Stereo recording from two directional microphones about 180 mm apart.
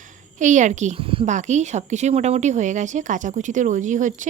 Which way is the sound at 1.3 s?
40° right (ahead or behind).